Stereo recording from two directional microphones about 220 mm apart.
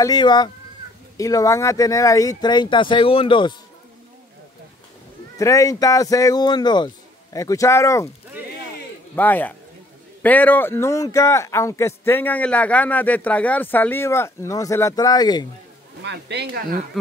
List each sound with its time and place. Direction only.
0.0 s speech: 20° left (ahead or behind)
5.4 s speech: 15° left (ahead or behind)
9.1 s speech: 10° left (ahead or behind)
16.0 s speech: 50° right (ahead or behind)
17.0 s speech: centre (ahead or behind)